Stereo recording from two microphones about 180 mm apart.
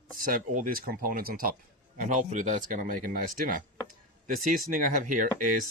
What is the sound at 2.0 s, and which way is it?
A man's voice, 45° right (ahead or behind).